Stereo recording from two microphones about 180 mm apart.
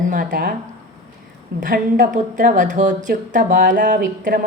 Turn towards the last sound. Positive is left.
turn(degrees=-45)  # may be behind; listen again after turning